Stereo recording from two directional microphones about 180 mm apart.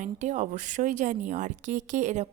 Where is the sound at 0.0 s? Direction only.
40° right (ahead or behind).